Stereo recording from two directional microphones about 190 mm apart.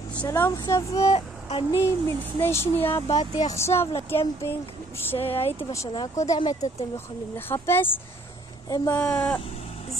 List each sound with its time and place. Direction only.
0.1 s speech: 10° left (ahead or behind)
3.1 s speech: 40° left (ahead or behind)
3.5 s speech: 15° left (ahead or behind)
5.3 s speech: 30° left (ahead or behind)
5.7 s speech: 15° left (ahead or behind)
8.9 s speech: 10° left (ahead or behind)